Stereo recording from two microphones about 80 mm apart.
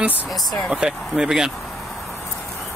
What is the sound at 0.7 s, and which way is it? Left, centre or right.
Speech, centre.